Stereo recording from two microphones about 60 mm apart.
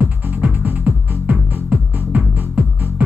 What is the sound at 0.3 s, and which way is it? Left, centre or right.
Music, right.